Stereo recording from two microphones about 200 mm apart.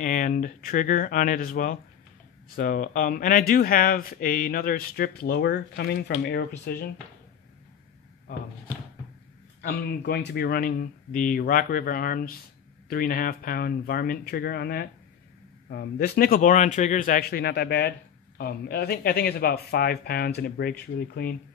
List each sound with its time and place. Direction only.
0.0 s speech: 40° left (ahead or behind)
9.6 s speech: 50° left (ahead or behind)